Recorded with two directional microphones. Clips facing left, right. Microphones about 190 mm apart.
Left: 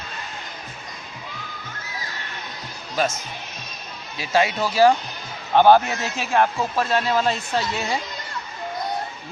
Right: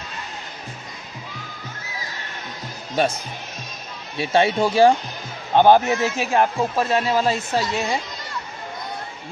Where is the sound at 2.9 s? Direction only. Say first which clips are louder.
Right 3 dB; 35° right (ahead or behind).